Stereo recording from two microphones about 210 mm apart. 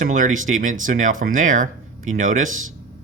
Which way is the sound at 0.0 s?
35° right (ahead or behind).